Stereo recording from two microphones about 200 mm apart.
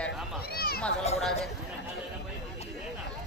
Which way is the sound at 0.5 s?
50° left (ahead or behind).